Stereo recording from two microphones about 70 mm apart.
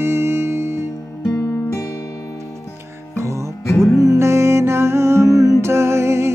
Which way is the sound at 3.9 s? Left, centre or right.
Right.